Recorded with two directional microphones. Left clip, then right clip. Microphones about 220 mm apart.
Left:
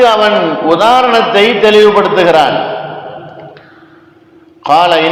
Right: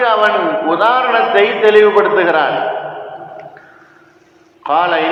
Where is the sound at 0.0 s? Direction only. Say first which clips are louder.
Left 4 dB; 50° left (ahead or behind).